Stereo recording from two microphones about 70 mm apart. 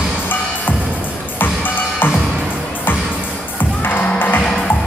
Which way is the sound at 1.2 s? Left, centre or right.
Left.